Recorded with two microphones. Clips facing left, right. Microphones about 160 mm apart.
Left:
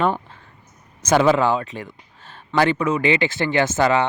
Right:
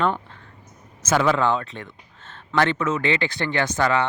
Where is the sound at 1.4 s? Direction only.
10° left (ahead or behind).